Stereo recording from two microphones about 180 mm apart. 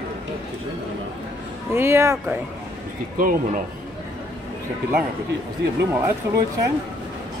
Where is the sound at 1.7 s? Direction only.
15° right (ahead or behind).